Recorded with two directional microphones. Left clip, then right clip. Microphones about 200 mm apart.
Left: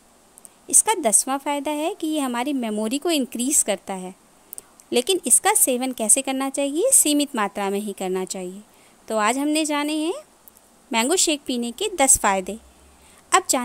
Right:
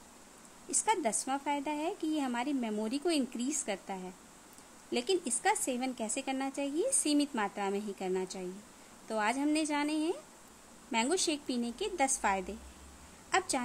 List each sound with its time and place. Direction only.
0.7 s a woman's voice: 45° left (ahead or behind)